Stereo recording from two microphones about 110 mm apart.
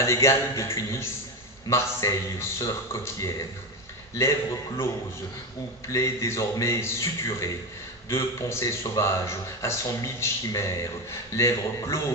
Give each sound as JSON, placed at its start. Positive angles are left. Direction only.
{"t": 0.0, "sound": "a man's voice", "side_deg": 25}
{"t": 5.9, "sound": "a man's voice", "side_deg": 25}